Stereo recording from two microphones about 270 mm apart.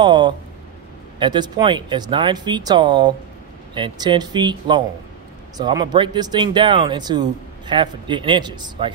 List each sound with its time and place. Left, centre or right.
0.0 s speech: centre